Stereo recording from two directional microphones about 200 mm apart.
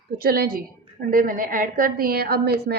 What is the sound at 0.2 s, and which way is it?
A woman's voice, 50° right (ahead or behind).